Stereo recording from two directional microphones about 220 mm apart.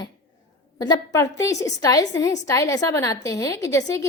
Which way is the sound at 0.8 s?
15° left (ahead or behind).